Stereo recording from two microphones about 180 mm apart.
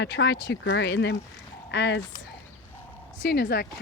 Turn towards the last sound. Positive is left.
turn(degrees=60)  # may be behind; listen again after turning